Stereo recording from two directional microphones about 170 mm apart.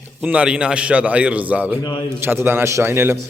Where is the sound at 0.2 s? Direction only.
5° right (ahead or behind).